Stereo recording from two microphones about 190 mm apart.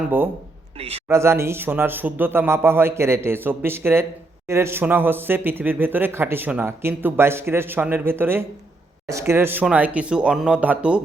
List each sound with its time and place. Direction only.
0.0 s a man's voice: 10° right (ahead or behind)
0.8 s a man's voice: 30° right (ahead or behind)
1.0 s a man's voice: 15° right (ahead or behind)